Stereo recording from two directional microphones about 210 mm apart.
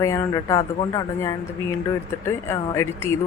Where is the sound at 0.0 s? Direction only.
15° left (ahead or behind).